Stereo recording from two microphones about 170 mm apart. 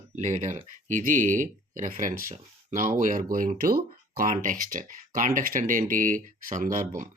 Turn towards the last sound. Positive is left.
turn(degrees=-50)  # may be behind; listen again after turning